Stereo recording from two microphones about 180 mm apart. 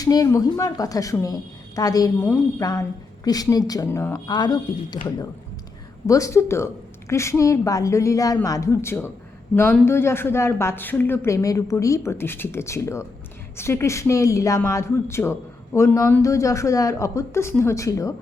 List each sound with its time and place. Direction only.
0.0 s a woman's voice: 20° left (ahead or behind)
6.1 s speech: 15° left (ahead or behind)